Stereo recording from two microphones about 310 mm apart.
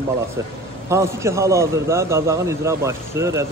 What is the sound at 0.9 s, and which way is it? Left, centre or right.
Speech, centre.